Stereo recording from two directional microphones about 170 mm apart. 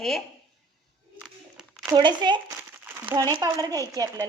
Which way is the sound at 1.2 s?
Centre (ahead or behind).